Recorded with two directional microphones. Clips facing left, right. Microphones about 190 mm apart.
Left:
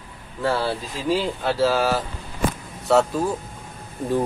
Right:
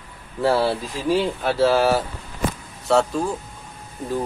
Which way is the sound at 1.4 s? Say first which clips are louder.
Right 3 dB; 5° right (ahead or behind).